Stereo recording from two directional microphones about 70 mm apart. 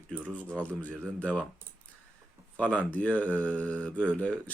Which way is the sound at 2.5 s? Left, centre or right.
Centre.